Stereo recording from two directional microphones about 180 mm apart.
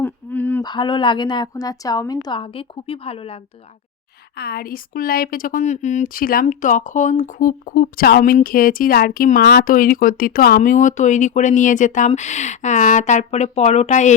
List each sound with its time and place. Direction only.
0.0 s a sound: 10° left (ahead or behind)
0.6 s a woman's voice: 25° left (ahead or behind)
4.4 s speech: 60° left (ahead or behind); by 14.1 s 40° left (ahead or behind)